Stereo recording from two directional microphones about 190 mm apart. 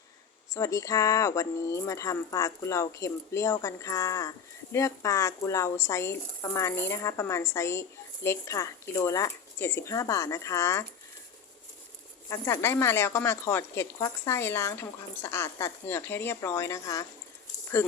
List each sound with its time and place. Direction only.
0.5 s speech: 15° left (ahead or behind)
12.3 s speech: 15° left (ahead or behind)